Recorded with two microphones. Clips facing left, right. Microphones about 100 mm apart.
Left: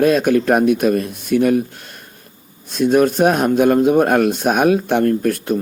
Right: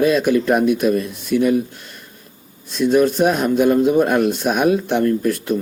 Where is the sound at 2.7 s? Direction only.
50° left (ahead or behind).